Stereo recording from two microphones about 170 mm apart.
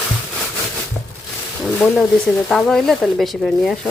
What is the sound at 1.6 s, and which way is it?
Speech, centre (ahead or behind).